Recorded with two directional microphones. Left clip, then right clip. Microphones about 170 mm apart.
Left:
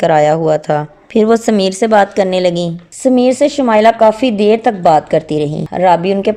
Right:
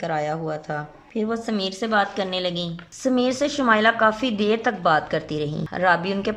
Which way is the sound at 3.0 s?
25° left (ahead or behind).